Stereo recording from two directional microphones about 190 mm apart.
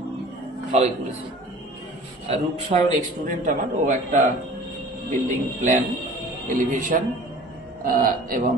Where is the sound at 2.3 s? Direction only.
35° right (ahead or behind).